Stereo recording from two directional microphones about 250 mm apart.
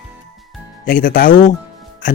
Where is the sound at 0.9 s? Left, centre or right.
Left.